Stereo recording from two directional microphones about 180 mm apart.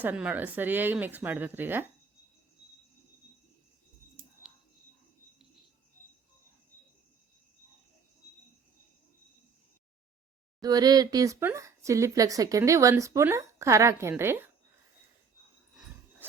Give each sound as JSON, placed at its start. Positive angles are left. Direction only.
{"t": 0.0, "sound": "speech", "side_deg": -10}
{"t": 10.6, "sound": "speech", "side_deg": -20}